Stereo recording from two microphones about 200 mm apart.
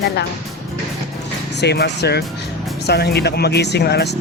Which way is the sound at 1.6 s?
60° left (ahead or behind).